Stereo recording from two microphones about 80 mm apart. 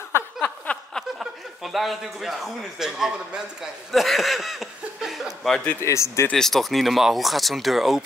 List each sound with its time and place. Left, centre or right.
0.1 s a sound: left
1.2 s a man's voice: centre
3.9 s speech: centre
5.8 s speech: left
6.3 s a man's voice: centre